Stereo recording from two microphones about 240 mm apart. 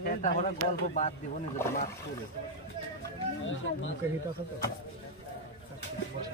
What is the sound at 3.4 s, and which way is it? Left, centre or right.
Speech, left.